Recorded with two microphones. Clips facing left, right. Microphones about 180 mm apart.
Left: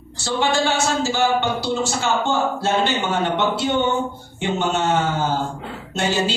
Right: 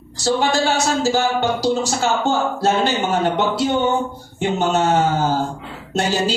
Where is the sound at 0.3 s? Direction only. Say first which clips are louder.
Right 2 dB; 40° right (ahead or behind).